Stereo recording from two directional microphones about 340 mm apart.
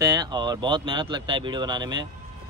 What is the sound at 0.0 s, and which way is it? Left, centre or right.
A man's voice, centre.